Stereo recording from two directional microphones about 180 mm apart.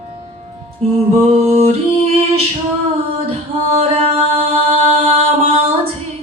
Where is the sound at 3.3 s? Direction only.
35° right (ahead or behind).